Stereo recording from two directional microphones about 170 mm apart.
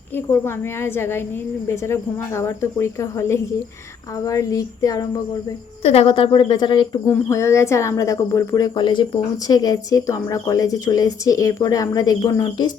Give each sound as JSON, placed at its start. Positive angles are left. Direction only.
{"t": 0.4, "sound": "a woman's voice", "side_deg": 15}
{"t": 5.8, "sound": "a woman's voice", "side_deg": 35}